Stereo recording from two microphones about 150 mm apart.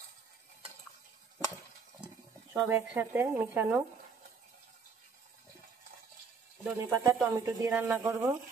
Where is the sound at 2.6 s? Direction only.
15° right (ahead or behind).